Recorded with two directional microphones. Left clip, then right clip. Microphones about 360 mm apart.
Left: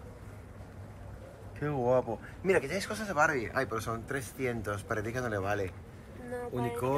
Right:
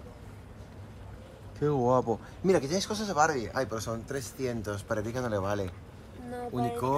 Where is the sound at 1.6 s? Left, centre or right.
Centre.